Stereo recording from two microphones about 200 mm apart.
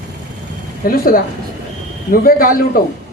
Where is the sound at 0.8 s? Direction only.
45° left (ahead or behind).